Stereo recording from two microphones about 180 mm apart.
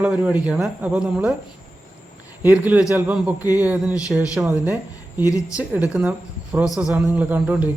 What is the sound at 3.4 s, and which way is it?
Speech, 20° left (ahead or behind).